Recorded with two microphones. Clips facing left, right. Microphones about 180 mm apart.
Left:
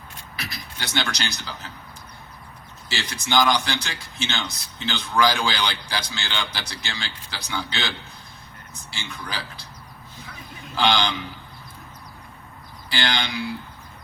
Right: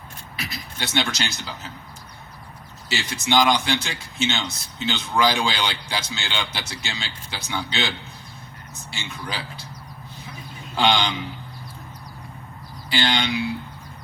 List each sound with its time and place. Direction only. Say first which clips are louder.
0.5 s a man's voice: right 3 dB; 25° right (ahead or behind)
3.1 s a man's voice: right 1 dB; 20° right (ahead or behind)
8.9 s a man's voice: right 2 dB; 20° right (ahead or behind)
10.8 s a man's voice: right 1 dB; 20° right (ahead or behind)
12.9 s a man's voice: right 3 dB; 25° right (ahead or behind)